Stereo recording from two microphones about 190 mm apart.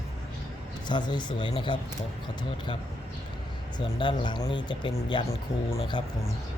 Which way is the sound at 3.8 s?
25° left (ahead or behind).